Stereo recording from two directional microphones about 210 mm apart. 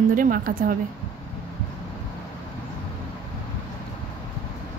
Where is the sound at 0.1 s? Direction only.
40° right (ahead or behind).